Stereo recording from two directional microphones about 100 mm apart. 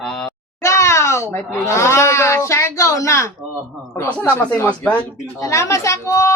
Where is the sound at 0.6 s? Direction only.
30° left (ahead or behind).